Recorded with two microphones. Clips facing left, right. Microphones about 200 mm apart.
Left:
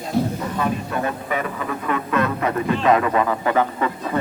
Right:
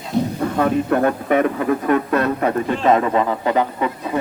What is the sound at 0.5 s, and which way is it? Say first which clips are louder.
Speech: right 9 dB; 60° right (ahead or behind).